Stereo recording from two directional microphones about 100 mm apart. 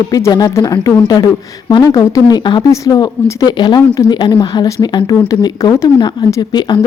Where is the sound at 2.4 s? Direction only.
50° left (ahead or behind).